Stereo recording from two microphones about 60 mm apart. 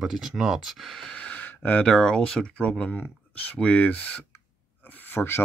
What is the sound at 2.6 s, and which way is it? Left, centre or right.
Speech, left.